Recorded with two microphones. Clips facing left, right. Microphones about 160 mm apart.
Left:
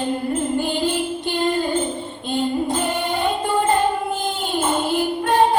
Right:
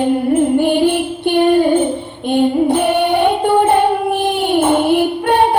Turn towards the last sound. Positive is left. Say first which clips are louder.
# right 4 dB
turn(degrees=-65)  # may be behind; listen again after turning